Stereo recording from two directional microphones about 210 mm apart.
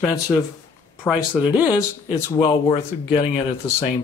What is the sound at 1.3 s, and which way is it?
Speech, 15° left (ahead or behind).